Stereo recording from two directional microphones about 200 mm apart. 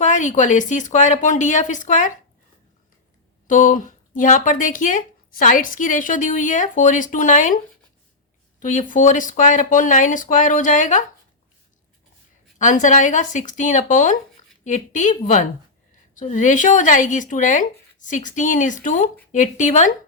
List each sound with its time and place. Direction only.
0.0 s speech: 40° left (ahead or behind)
3.4 s speech: 40° left (ahead or behind)
8.6 s speech: 40° left (ahead or behind)
12.5 s speech: 40° left (ahead or behind)
16.1 s speech: 40° left (ahead or behind)